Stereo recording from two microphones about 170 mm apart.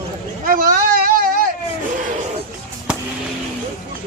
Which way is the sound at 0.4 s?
55° right (ahead or behind).